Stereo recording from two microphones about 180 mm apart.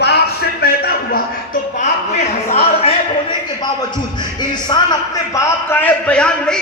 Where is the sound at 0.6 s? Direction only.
60° left (ahead or behind).